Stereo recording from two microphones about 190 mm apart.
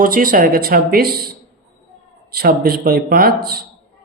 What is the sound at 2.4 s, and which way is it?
Speech, 50° right (ahead or behind).